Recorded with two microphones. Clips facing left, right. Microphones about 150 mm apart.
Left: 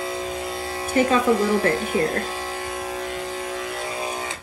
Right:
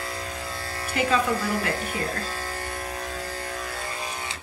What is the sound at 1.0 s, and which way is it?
Speech, 20° left (ahead or behind).